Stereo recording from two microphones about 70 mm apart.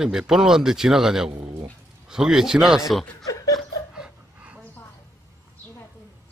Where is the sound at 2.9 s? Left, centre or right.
Centre.